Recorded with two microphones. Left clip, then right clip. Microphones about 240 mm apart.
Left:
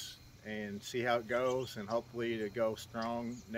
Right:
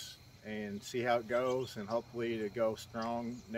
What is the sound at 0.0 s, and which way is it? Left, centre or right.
Speech, centre.